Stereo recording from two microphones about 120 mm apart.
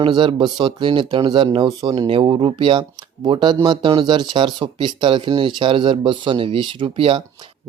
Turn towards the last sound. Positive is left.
turn(degrees=-50)  # may be behind; listen again after turning